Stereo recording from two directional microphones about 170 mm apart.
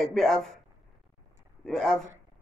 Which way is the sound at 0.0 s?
Centre (ahead or behind).